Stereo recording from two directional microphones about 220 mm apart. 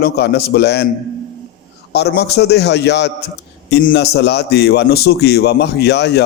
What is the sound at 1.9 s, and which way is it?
A man's voice, 50° left (ahead or behind).